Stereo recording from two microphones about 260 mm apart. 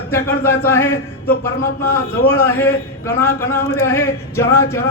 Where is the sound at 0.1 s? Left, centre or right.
Centre.